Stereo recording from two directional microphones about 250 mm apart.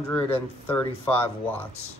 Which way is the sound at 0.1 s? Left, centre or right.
Centre.